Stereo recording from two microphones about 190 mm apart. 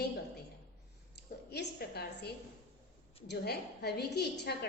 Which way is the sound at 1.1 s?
60° left (ahead or behind).